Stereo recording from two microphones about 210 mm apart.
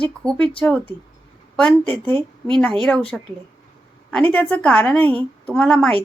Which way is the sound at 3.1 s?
5° left (ahead or behind).